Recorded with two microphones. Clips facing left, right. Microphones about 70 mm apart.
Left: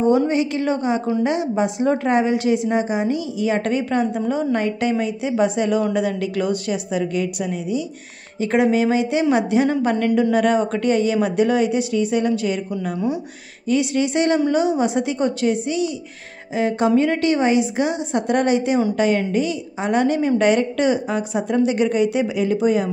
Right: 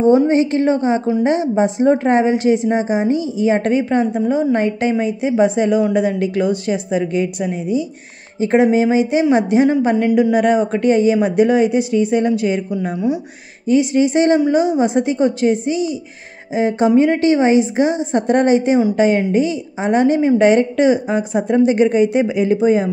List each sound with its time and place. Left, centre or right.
0.0 s a woman's voice: right
13.7 s a woman's voice: right